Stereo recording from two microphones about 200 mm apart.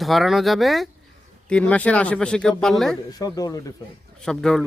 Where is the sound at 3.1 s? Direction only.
20° left (ahead or behind).